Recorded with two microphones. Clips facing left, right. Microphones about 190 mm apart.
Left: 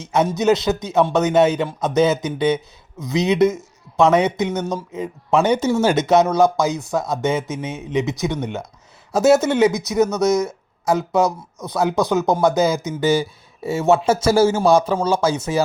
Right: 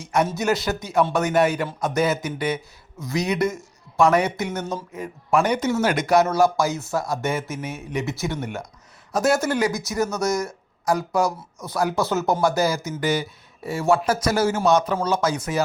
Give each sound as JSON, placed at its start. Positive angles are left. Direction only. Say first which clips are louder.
{"t": 0.0, "sound": "speech", "louder": "left 4 dB", "side_deg": 20}